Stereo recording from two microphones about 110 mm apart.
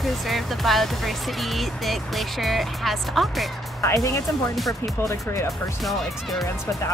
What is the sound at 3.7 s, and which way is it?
Speech, 25° left (ahead or behind).